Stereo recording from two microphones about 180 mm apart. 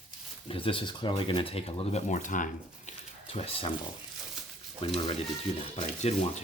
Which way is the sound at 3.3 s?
35° left (ahead or behind).